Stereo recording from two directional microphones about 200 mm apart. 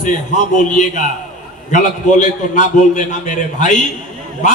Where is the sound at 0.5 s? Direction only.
40° left (ahead or behind).